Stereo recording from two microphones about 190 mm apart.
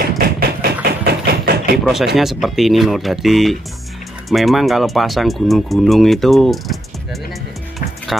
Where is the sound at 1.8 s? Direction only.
Centre (ahead or behind).